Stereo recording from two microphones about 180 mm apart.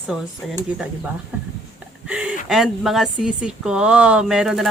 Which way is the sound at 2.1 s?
5° right (ahead or behind).